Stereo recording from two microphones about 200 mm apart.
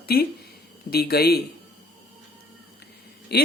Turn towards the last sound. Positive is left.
turn(degrees=55)  # may be behind; listen again after turning